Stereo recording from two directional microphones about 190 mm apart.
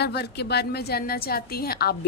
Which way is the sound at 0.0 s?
60° left (ahead or behind).